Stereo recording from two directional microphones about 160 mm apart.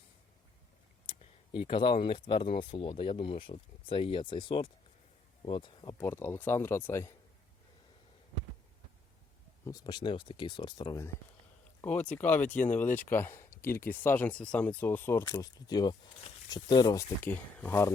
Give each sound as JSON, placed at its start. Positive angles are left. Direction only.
{"t": 1.0, "sound": "speech", "side_deg": 35}
{"t": 6.0, "sound": "speech", "side_deg": 15}
{"t": 9.6, "sound": "speech", "side_deg": 25}
{"t": 11.8, "sound": "speech", "side_deg": 10}
{"t": 15.2, "sound": "speech", "side_deg": 25}